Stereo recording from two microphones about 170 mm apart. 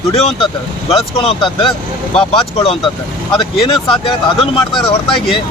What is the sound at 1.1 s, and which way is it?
Speech, 30° left (ahead or behind).